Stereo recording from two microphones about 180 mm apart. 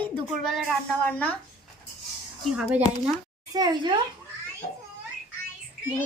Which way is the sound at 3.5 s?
20° right (ahead or behind).